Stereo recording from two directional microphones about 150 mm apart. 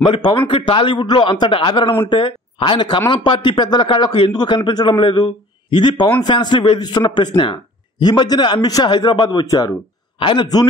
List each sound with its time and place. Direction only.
0.0 s a man's voice: 30° left (ahead or behind)